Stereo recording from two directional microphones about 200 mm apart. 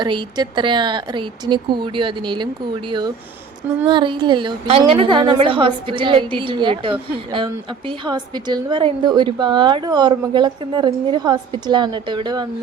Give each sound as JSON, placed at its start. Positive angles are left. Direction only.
{"t": 0.0, "sound": "a woman's voice", "side_deg": -20}
{"t": 3.8, "sound": "a woman's voice", "side_deg": -25}